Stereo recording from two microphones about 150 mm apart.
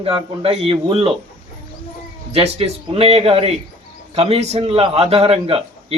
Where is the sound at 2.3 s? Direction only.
40° right (ahead or behind).